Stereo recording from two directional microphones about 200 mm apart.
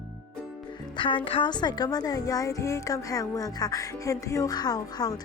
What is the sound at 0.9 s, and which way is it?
A child's voice, 25° left (ahead or behind).